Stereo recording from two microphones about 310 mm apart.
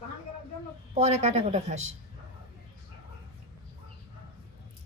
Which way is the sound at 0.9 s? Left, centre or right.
Right.